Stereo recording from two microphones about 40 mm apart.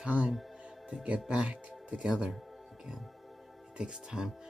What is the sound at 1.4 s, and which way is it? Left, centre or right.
Speech, right.